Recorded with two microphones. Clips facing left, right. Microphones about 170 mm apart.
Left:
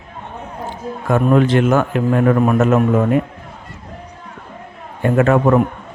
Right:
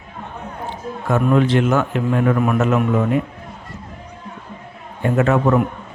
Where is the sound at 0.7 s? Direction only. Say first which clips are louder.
Left 2 dB; 50° left (ahead or behind).